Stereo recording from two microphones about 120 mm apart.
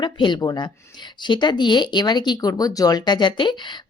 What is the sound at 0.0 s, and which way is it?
Speech, 40° left (ahead or behind).